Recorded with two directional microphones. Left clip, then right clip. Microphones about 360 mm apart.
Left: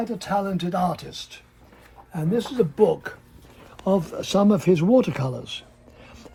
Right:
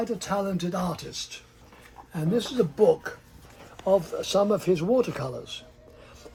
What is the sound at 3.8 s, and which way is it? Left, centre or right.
Speech, left.